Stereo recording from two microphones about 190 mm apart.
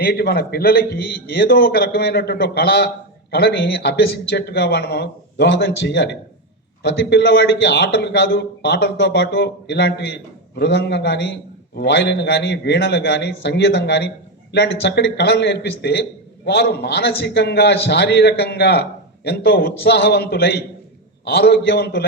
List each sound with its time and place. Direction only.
0.0 s a man's voice: 55° left (ahead or behind)